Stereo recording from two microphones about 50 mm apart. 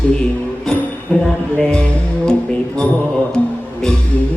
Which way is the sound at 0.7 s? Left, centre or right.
Centre.